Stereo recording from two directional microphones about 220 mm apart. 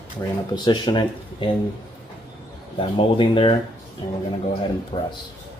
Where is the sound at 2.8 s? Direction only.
25° left (ahead or behind).